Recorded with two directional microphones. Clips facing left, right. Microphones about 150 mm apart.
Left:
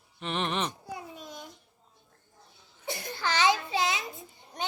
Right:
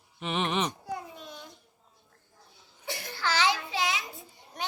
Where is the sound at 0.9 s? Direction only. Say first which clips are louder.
Right 2 dB; 10° left (ahead or behind).